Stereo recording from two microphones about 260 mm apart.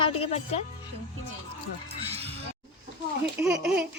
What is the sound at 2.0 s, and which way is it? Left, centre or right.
Music, right.